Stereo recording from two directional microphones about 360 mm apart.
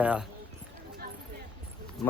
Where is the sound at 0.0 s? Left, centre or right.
Centre.